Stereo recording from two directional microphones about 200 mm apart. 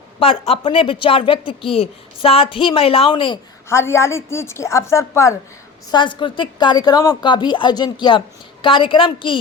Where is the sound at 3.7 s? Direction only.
15° left (ahead or behind).